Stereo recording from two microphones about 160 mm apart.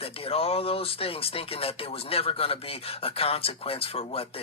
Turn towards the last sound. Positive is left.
turn(degrees=35)  # may be behind; listen again after turning